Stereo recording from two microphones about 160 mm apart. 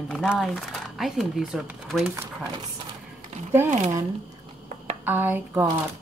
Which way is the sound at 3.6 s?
50° right (ahead or behind).